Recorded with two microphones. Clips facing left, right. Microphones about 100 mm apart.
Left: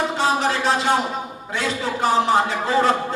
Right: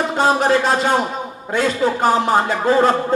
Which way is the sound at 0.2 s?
45° right (ahead or behind).